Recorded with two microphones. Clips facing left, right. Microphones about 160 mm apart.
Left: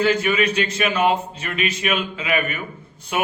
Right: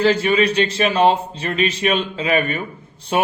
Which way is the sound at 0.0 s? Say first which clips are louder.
Right 3 dB; 35° right (ahead or behind).